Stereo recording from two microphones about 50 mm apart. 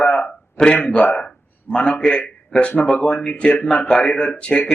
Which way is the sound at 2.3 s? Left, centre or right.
Centre.